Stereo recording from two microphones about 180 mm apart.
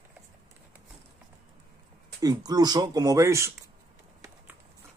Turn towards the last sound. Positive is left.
turn(degrees=-15)  # may be behind; listen again after turning